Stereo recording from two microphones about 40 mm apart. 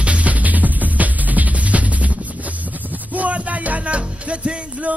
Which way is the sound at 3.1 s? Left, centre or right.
Right.